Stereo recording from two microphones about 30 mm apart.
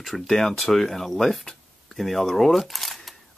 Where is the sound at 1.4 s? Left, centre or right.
Left.